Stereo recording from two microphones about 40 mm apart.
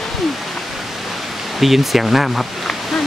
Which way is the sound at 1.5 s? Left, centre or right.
Centre.